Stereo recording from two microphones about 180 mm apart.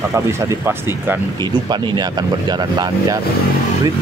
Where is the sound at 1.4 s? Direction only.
25° right (ahead or behind).